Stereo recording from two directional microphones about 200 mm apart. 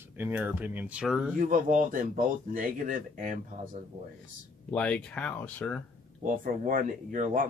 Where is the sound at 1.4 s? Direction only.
40° right (ahead or behind).